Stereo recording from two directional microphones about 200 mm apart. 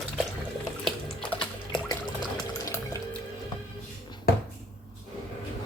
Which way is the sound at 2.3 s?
15° left (ahead or behind).